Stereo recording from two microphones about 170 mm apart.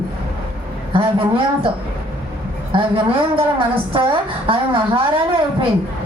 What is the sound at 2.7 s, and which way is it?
A woman's voice, 30° right (ahead or behind).